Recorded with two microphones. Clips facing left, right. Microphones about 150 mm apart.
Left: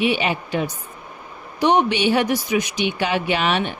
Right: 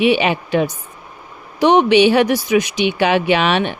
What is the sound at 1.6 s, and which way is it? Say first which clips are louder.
Speech: right 6 dB; 90° right.